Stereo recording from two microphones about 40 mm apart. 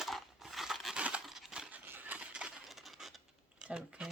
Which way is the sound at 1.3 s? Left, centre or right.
Centre.